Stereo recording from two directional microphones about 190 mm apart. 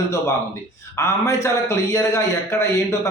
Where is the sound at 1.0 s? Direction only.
15° left (ahead or behind).